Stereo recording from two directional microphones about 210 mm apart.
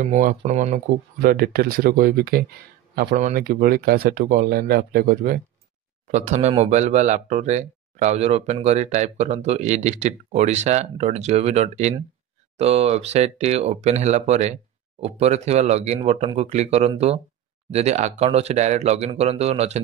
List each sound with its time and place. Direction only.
0.0 s speech: 40° right (ahead or behind)
1.2 s speech: 45° right (ahead or behind); by 19.8 s 30° right (ahead or behind)